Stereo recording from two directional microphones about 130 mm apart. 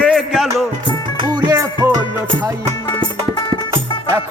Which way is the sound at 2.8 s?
35° left (ahead or behind).